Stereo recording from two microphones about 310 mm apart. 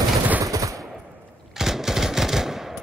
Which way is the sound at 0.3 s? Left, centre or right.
Centre.